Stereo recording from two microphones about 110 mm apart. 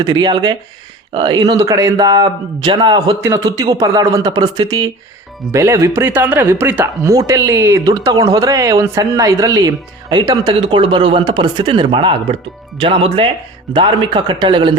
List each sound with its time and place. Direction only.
0.0 s speech: 40° right (ahead or behind)
3.2 s speech: 25° right (ahead or behind)
5.5 s speech: 25° right (ahead or behind)
7.1 s speech: 30° right (ahead or behind); by 13.2 s 55° right (ahead or behind)
13.7 s speech: 45° right (ahead or behind)